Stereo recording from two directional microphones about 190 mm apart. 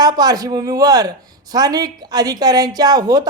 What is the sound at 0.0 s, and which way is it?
Speech, 20° right (ahead or behind).